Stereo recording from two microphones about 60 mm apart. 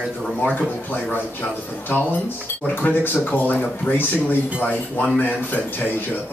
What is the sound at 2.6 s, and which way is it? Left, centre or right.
A man's voice, left.